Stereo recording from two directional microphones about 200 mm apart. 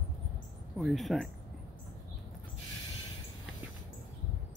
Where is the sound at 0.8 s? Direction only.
Centre (ahead or behind).